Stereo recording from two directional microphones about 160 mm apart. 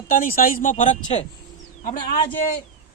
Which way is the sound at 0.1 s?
60° left (ahead or behind).